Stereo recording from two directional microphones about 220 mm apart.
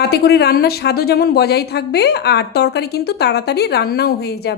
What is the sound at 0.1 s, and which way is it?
A woman's voice, 45° left (ahead or behind).